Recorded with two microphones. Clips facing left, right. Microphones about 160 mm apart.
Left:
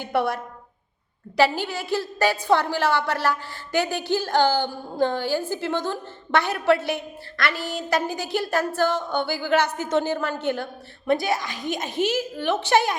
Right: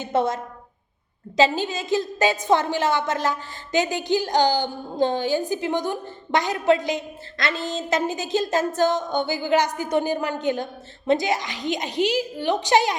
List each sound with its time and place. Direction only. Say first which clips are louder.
0.0 s a woman's voice: right 1 dB; 20° right (ahead or behind)
1.4 s a woman's voice: right 1 dB; 20° right (ahead or behind)